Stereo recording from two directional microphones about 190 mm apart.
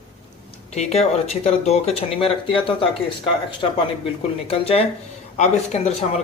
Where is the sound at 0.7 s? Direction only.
35° left (ahead or behind).